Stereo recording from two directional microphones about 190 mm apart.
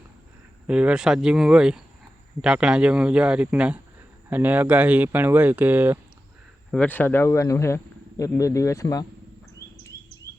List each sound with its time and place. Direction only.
0.7 s speech: 5° right (ahead or behind)
6.7 s speech: 5° left (ahead or behind)